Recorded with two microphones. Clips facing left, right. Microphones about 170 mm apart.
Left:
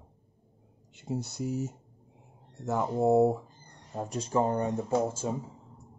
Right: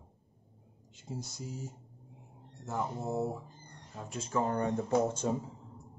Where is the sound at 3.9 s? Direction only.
35° left (ahead or behind).